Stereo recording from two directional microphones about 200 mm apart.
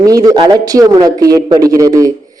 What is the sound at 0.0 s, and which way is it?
A man's voice, 15° right (ahead or behind).